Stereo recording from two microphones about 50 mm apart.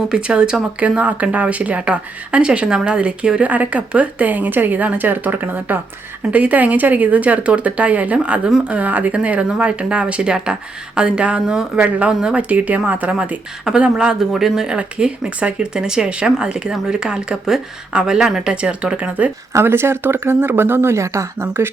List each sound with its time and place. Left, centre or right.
0.1 s speech: centre
3.4 s speech: right
13.7 s speech: centre
14.7 s speech: centre
19.6 s speech: right
20.9 s speech: right
21.4 s speech: right